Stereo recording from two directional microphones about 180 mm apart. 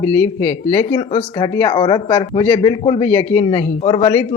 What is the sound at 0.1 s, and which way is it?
Speech, 15° left (ahead or behind).